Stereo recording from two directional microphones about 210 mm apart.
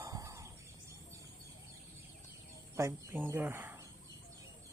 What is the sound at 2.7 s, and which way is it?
Speech, 15° right (ahead or behind).